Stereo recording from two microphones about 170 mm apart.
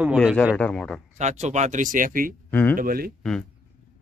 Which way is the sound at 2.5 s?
10° left (ahead or behind).